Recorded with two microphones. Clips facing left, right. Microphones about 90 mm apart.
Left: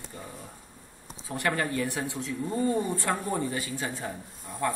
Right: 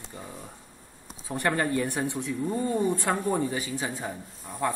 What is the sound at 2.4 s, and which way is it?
Speech, 5° right (ahead or behind).